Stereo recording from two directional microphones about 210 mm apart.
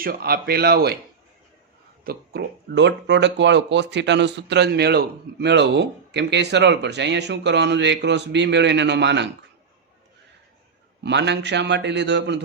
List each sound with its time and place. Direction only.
0.0 s speech: 45° right (ahead or behind)
2.0 s speech: 50° right (ahead or behind)
11.0 s speech: 55° right (ahead or behind)